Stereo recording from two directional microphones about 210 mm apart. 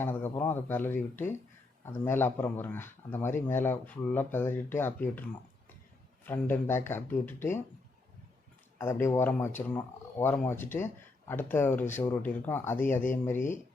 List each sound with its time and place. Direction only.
0.0 s speech: 10° left (ahead or behind)
6.2 s speech: 10° left (ahead or behind)
8.8 s speech: 10° left (ahead or behind)